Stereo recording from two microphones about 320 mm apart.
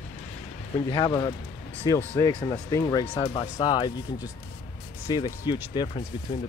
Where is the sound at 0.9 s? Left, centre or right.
Centre.